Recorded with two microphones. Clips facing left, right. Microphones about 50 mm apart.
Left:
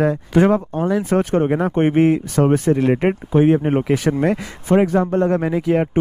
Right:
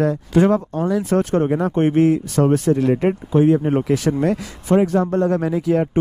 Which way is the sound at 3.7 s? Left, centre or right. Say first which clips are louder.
Left 1 dB; left.